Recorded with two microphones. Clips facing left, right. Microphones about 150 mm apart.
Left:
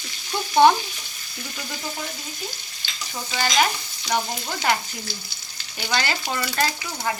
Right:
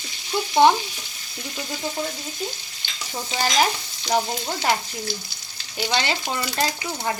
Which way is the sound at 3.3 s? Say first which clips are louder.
Even; 25° right (ahead or behind).